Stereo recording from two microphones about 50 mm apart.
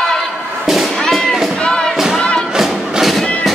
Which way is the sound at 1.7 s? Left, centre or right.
Centre.